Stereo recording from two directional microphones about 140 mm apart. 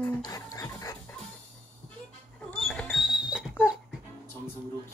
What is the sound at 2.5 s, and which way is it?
Creak, 5° left (ahead or behind).